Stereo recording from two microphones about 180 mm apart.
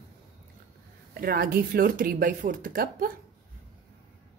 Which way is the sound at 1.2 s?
55° right (ahead or behind).